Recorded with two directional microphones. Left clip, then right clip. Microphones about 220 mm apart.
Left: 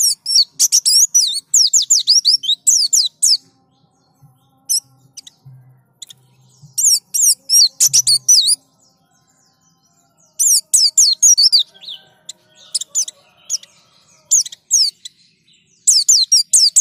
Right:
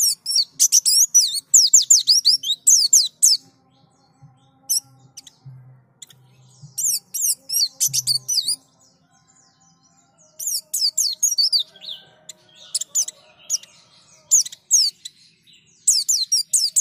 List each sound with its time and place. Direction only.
0.0 s bird: 10° left (ahead or behind)
4.6 s mouse: 10° left (ahead or behind)
6.7 s mouse: 20° left (ahead or behind)
7.1 s bird: 20° left (ahead or behind)
7.8 s chirp: 20° left (ahead or behind)
10.3 s bird: 25° left (ahead or behind)
12.3 s bird: 10° left (ahead or behind)
14.3 s rodents: 15° left (ahead or behind)
15.8 s a sound: 15° left (ahead or behind)